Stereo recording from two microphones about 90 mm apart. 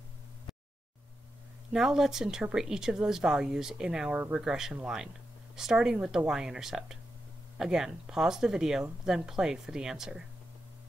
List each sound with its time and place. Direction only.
1.7 s speech: 5° right (ahead or behind)